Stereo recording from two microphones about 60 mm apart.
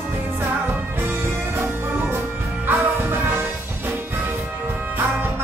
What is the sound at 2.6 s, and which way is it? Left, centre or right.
Music, right.